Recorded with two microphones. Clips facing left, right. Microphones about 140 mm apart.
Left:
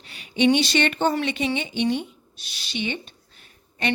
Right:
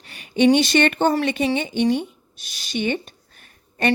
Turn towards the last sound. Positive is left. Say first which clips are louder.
# right 6 dB
turn(degrees=-50)  # may be behind; listen again after turning